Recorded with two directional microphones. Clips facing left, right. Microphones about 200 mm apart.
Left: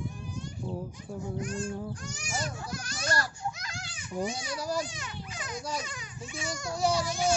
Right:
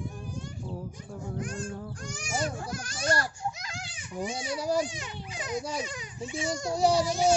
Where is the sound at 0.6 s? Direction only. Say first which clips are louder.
Left 4 dB; 15° left (ahead or behind).